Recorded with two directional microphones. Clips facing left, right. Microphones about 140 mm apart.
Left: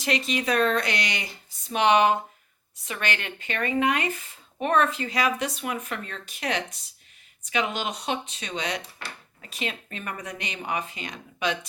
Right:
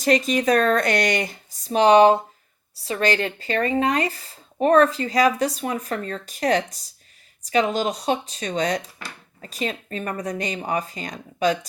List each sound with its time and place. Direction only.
0.0 s speech: 45° right (ahead or behind)